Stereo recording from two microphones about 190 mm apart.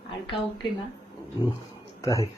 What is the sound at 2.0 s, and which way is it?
Speech, 15° left (ahead or behind).